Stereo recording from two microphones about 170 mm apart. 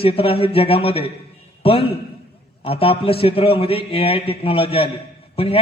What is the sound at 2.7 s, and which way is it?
A man's voice, 35° left (ahead or behind).